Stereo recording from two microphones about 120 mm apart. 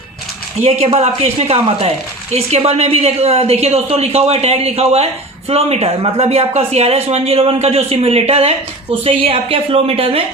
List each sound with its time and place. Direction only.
0.6 s speech: 15° right (ahead or behind)
0.9 s a woman's voice: 60° right (ahead or behind)